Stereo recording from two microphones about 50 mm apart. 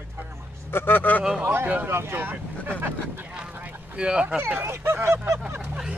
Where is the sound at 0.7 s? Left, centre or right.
Left.